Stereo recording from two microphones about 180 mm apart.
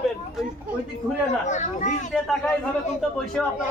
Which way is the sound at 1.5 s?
40° left (ahead or behind).